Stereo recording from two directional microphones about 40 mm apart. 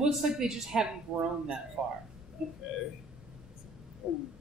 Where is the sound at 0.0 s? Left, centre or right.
Centre.